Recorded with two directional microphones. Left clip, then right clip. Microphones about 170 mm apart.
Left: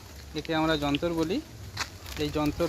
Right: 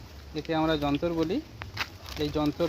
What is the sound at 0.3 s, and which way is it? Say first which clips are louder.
Speech: even; centre (ahead or behind).